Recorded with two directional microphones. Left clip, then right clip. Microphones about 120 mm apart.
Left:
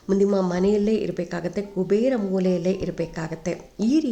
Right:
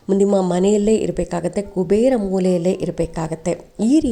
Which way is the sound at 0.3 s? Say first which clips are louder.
Right 5 dB; 35° right (ahead or behind).